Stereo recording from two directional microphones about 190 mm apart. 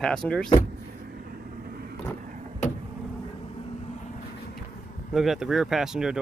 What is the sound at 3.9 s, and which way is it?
Vehicle, 40° left (ahead or behind).